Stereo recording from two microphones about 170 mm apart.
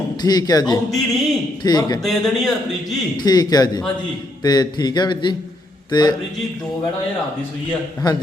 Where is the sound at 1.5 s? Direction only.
25° left (ahead or behind).